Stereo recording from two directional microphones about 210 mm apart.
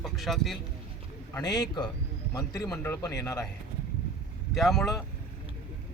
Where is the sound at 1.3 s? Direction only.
20° left (ahead or behind).